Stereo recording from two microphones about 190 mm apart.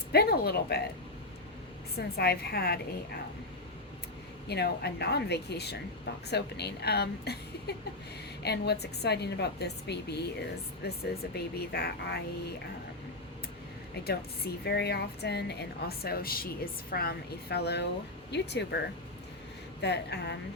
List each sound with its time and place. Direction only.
0.1 s a woman's voice: 55° left (ahead or behind)
2.0 s a woman's voice: 55° left (ahead or behind)
4.4 s a woman's voice: 60° left (ahead or behind)
14.6 s a woman's voice: 60° left (ahead or behind)
19.8 s a woman's voice: 65° left (ahead or behind)